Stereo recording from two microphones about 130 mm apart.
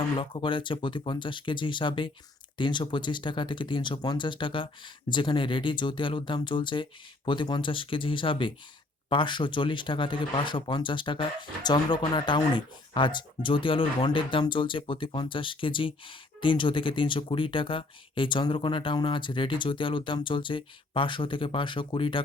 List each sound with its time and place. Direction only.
0.2 s speech: 40° left (ahead or behind)